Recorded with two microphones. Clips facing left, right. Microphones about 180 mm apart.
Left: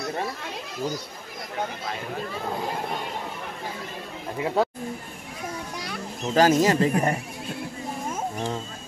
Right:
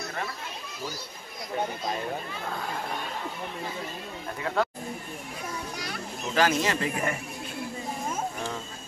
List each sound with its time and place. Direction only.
4.4 s speech: 15° left (ahead or behind)
6.3 s a man's voice: 40° left (ahead or behind)